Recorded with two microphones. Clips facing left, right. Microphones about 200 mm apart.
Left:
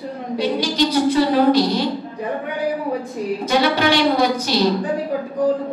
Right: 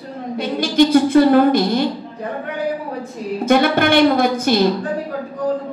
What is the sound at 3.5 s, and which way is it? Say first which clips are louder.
A woman's voice: right 4 dB; 55° right (ahead or behind).